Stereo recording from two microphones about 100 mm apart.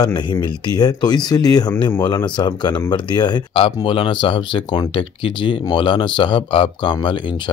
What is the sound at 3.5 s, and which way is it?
Speech, 65° left (ahead or behind).